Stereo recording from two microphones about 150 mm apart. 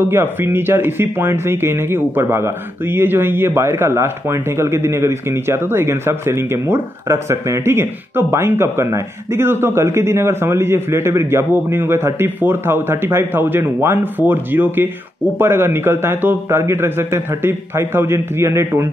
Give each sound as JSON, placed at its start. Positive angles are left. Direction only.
{"t": 0.1, "sound": "speech", "side_deg": -15}